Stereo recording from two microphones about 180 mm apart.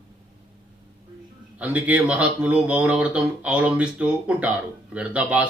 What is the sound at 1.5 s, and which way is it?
Speech, 5° right (ahead or behind).